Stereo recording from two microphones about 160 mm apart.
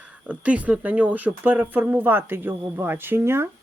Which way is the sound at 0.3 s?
10° right (ahead or behind).